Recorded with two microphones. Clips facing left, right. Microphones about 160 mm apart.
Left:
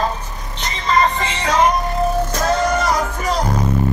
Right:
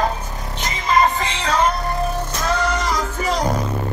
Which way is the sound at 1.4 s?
10° left (ahead or behind).